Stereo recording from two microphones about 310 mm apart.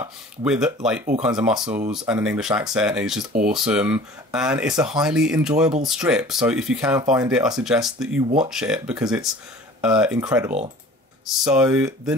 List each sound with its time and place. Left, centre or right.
0.0 s speech: centre